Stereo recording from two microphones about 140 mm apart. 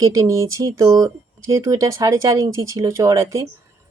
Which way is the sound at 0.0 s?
25° right (ahead or behind).